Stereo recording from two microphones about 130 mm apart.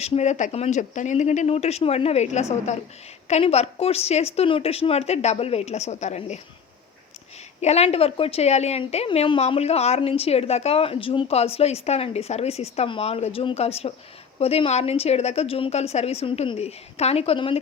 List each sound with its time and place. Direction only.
0.0 s speech: 55° left (ahead or behind)
7.6 s speech: 55° left (ahead or behind)